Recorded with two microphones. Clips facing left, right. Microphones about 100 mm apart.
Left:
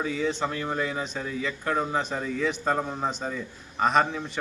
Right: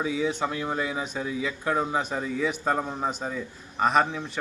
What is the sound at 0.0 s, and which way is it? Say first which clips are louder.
Speech: right 1 dB; 10° right (ahead or behind).